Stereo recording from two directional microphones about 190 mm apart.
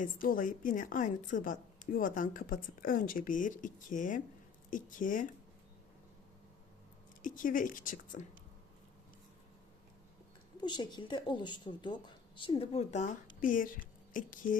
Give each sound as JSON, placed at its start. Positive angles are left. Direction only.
{"t": 0.0, "sound": "a woman's voice", "side_deg": 45}
{"t": 7.2, "sound": "a woman's voice", "side_deg": 45}
{"t": 10.6, "sound": "a woman's voice", "side_deg": 25}